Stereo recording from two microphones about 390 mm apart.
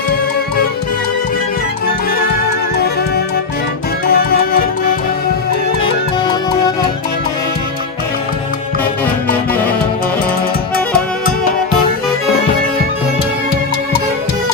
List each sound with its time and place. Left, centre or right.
4.0 s music: left
5.8 s music: centre